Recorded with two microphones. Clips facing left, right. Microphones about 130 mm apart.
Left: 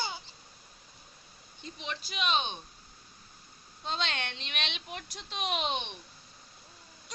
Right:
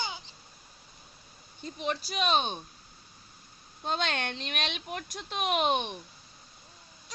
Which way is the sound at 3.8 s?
50° right (ahead or behind).